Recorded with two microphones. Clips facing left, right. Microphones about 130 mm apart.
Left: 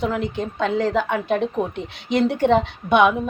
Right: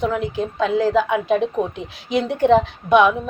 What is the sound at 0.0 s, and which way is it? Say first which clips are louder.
A woman's voice: right 2 dB; centre (ahead or behind).